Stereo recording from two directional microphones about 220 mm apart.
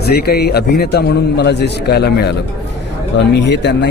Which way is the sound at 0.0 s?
45° left (ahead or behind).